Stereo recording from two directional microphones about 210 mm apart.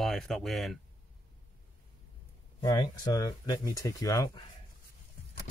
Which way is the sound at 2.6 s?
20° left (ahead or behind).